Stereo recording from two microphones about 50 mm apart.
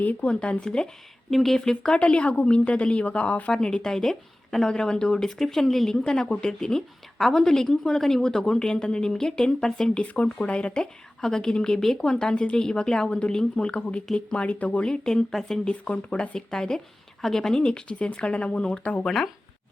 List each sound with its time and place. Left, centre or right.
0.0 s speech: left
0.3 s speech: left
1.3 s a woman's voice: centre
2.0 s speech: left
3.8 s a woman's voice: centre
13.6 s speech: left
14.8 s a woman's voice: centre
15.7 s speech: left
19.0 s a woman's voice: centre